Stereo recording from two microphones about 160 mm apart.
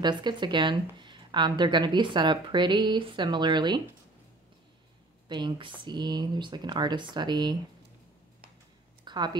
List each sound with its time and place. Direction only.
0.0 s speech: 30° right (ahead or behind)
5.3 s speech: 30° right (ahead or behind)
9.0 s speech: 25° right (ahead or behind)